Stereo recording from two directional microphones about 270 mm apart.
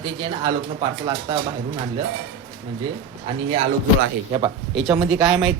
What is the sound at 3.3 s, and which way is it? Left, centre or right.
Speech, right.